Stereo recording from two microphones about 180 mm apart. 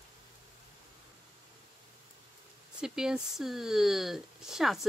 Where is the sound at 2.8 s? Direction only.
5° right (ahead or behind).